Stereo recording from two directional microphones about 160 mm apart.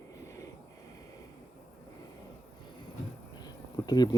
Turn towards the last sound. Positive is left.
turn(degrees=25)  # may be behind; listen again after turning